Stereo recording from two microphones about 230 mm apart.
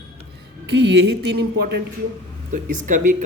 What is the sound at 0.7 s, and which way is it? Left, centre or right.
Speech, right.